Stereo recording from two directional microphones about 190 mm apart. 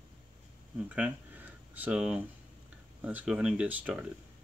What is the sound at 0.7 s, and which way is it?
Speech, 5° right (ahead or behind).